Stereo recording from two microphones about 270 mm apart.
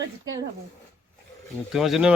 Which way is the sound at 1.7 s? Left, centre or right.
Centre.